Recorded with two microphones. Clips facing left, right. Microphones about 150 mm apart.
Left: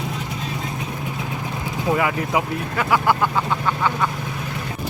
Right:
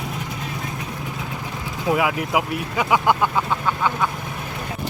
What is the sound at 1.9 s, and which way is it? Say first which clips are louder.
Speech: even; 5° right (ahead or behind).